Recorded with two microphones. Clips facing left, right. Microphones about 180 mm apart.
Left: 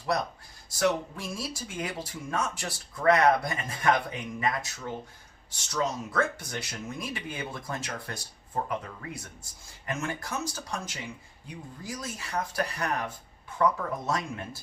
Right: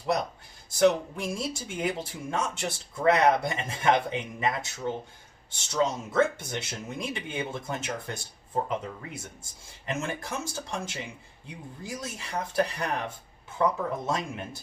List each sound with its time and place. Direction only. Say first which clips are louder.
0.8 s speech: right 5 dB; 25° right (ahead or behind)